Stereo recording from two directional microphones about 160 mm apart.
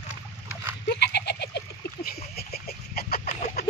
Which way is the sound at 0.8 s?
90° left.